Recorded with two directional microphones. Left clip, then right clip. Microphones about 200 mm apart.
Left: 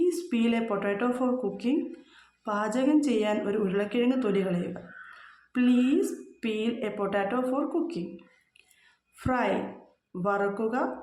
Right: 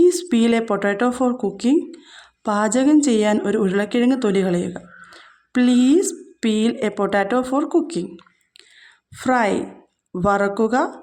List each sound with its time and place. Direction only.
0.0 s speech: 45° right (ahead or behind)